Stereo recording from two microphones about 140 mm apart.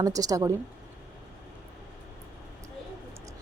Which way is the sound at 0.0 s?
25° right (ahead or behind).